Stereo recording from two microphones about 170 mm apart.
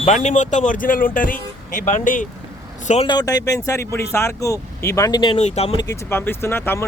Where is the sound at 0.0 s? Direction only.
45° left (ahead or behind).